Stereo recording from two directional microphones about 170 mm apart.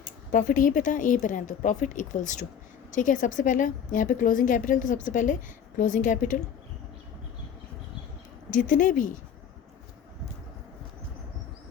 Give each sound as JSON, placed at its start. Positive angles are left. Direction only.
{"t": 0.3, "sound": "a woman's voice", "side_deg": 50}
{"t": 8.4, "sound": "a woman's voice", "side_deg": 50}